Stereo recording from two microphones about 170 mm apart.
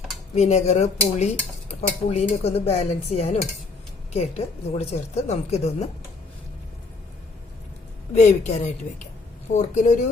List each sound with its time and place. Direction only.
0.3 s a woman's voice: 40° left (ahead or behind)
8.1 s speech: 45° left (ahead or behind)